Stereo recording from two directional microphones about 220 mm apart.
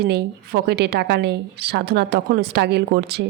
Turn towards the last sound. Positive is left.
turn(degrees=-45)  # may be behind; listen again after turning